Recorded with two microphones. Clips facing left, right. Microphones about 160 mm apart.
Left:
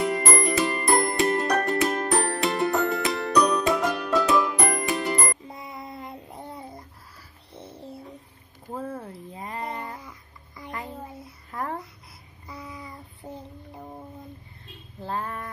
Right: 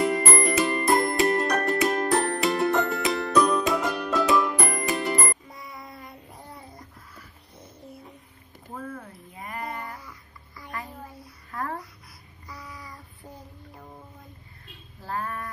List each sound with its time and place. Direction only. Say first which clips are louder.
0.0 s music: right 1 dB; centre (ahead or behind)
5.5 s child singing: left 4 dB; 25° left (ahead or behind)
8.7 s music: left 4 dB; 30° left (ahead or behind)
12.4 s child singing: left 3 dB; 25° left (ahead or behind)
15.0 s music: left 1 dB; 20° left (ahead or behind)